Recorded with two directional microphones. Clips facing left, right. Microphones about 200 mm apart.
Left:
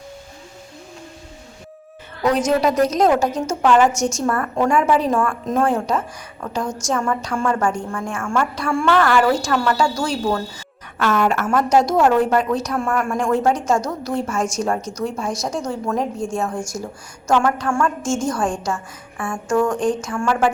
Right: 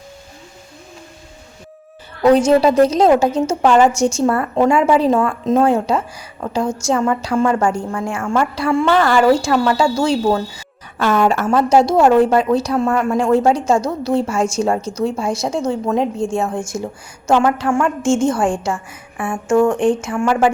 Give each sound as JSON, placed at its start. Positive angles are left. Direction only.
{"t": 2.2, "sound": "a woman's voice", "side_deg": -30}
{"t": 6.6, "sound": "a woman's voice", "side_deg": -10}
{"t": 6.8, "sound": "a woman's voice", "side_deg": -25}
{"t": 17.3, "sound": "a woman's voice", "side_deg": -20}